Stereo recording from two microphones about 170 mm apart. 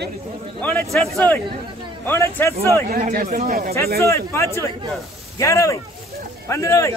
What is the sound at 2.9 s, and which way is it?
Speech, 55° right (ahead or behind).